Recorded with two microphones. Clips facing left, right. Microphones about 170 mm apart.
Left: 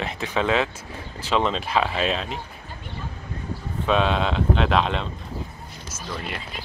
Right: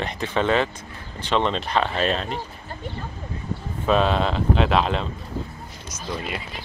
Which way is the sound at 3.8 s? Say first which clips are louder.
Right 1 dB; centre (ahead or behind).